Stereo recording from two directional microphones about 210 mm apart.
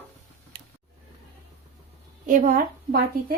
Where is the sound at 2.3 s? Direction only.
40° right (ahead or behind).